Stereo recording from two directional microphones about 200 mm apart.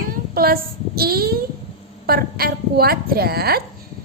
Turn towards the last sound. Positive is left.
turn(degrees=-50)  # may be behind; listen again after turning